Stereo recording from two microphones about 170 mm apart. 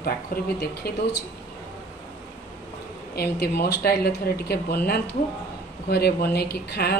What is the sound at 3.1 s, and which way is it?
Speech, 65° left (ahead or behind).